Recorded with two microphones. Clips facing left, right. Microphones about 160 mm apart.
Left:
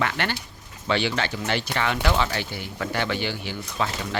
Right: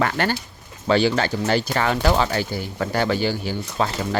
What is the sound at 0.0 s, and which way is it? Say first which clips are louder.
Speech: right 5 dB; 40° right (ahead or behind).